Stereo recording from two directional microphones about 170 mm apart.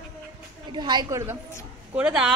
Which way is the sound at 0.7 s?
25° right (ahead or behind).